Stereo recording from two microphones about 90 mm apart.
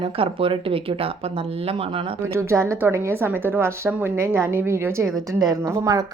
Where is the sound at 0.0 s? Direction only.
85° right.